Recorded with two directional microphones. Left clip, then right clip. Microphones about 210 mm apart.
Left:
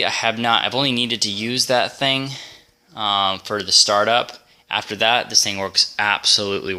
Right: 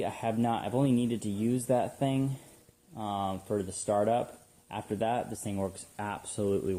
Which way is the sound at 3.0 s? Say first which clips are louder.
Left 15 dB; 35° left (ahead or behind).